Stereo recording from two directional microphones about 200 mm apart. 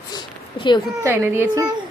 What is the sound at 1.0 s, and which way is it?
Speech, 10° right (ahead or behind).